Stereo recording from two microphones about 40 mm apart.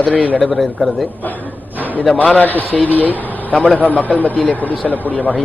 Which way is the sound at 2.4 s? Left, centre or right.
Left.